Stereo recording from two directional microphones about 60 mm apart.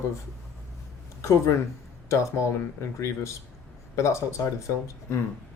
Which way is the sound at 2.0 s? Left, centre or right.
Left.